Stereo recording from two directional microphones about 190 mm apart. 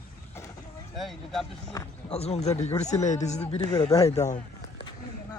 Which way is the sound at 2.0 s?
30° left (ahead or behind).